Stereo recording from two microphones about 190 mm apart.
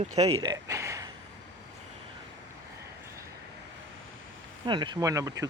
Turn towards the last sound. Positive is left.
turn(degrees=-20)  # may be behind; listen again after turning